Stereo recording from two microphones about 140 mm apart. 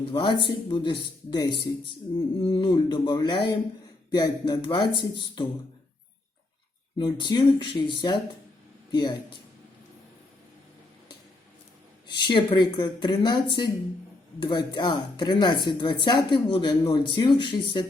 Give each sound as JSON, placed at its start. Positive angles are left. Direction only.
{"t": 0.0, "sound": "speech", "side_deg": 35}
{"t": 7.0, "sound": "speech", "side_deg": 30}
{"t": 12.0, "sound": "speech", "side_deg": 35}